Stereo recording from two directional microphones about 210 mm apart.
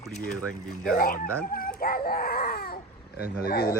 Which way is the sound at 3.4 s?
50° left (ahead or behind).